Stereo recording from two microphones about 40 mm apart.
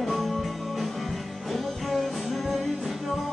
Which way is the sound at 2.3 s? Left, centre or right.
Centre.